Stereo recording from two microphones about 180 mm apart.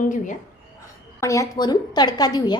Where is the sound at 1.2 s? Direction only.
15° left (ahead or behind).